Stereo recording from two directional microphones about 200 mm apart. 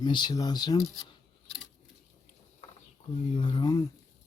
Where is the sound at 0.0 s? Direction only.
20° left (ahead or behind).